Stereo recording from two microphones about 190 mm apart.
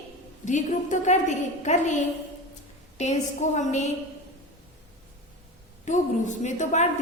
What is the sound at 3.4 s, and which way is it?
Speech, 40° left (ahead or behind).